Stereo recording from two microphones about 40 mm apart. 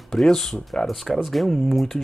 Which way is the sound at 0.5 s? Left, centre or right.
Left.